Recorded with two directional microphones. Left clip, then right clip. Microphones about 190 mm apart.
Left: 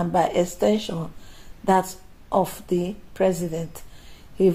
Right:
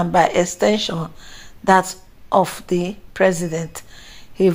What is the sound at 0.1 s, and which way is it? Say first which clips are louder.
Speech: right 5 dB; 5° right (ahead or behind).